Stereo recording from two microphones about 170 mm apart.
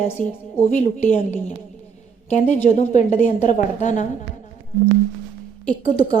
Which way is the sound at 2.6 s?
45° left (ahead or behind).